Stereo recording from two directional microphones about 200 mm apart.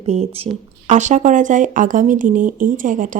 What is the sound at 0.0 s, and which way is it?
Speech, 30° right (ahead or behind).